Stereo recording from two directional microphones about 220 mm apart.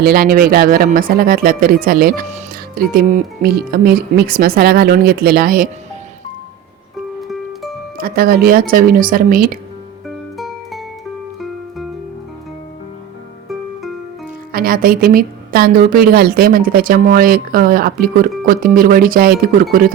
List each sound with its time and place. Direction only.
0.0 s a woman's voice: 45° right (ahead or behind)
7.2 s music: centre (ahead or behind)
7.9 s a woman's voice: 40° right (ahead or behind)
10.3 s music: centre (ahead or behind)
14.5 s a woman's voice: 40° right (ahead or behind)